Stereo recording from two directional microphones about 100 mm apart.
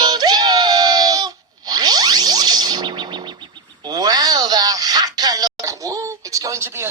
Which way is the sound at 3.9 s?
40° right (ahead or behind).